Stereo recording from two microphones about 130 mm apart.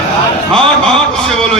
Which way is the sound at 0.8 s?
5° left (ahead or behind).